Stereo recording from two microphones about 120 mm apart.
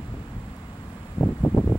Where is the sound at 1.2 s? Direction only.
15° left (ahead or behind).